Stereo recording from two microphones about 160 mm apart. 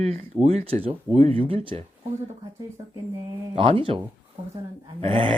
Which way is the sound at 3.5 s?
35° right (ahead or behind).